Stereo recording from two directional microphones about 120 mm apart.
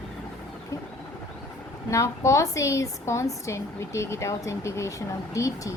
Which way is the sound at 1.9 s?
25° left (ahead or behind).